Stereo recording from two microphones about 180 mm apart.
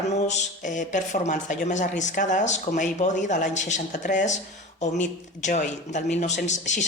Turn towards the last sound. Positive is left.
turn(degrees=40)  # may be behind; listen again after turning